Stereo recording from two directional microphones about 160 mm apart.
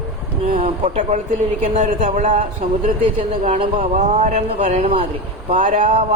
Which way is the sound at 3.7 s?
45° right (ahead or behind).